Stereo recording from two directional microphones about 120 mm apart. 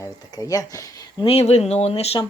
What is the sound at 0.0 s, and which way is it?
Speech, 30° left (ahead or behind).